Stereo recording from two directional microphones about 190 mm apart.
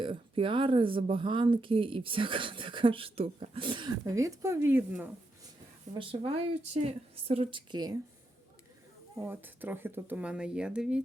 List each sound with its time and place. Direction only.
0.0 s speech: 25° right (ahead or behind); by 5.0 s 10° right (ahead or behind)
5.9 s speech: 25° right (ahead or behind)
9.1 s speech: 10° right (ahead or behind)